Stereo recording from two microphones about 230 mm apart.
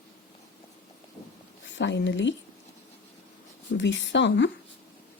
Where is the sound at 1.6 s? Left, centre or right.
Left.